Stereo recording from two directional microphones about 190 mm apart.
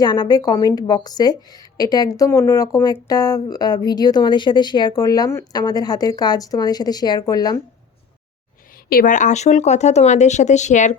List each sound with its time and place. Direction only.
0.0 s a woman's voice: 20° left (ahead or behind)
8.9 s speech: 45° left (ahead or behind)